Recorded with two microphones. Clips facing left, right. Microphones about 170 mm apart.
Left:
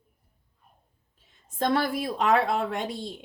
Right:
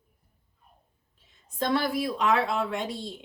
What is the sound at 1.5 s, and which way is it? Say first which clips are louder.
A woman's voice: left 1 dB; 50° left (ahead or behind).